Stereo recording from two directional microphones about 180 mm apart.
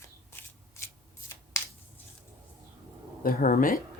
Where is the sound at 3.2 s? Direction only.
50° left (ahead or behind).